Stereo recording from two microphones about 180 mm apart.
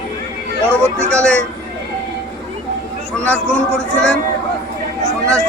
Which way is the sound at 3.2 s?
5° left (ahead or behind).